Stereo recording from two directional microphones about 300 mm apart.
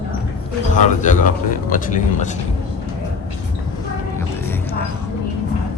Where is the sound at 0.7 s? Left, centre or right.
Left.